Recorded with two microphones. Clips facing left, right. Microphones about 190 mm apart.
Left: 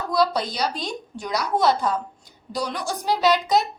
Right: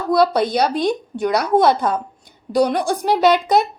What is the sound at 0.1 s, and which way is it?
A woman's voice, 60° right (ahead or behind).